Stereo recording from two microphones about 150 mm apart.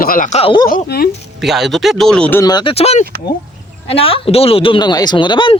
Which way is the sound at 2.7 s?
45° left (ahead or behind).